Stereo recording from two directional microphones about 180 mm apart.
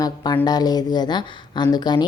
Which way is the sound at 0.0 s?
25° left (ahead or behind).